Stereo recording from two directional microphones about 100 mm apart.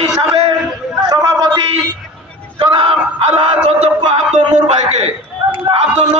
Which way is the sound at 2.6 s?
65° right (ahead or behind).